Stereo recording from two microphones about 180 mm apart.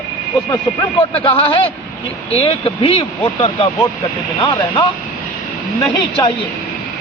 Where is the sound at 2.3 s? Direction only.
30° left (ahead or behind).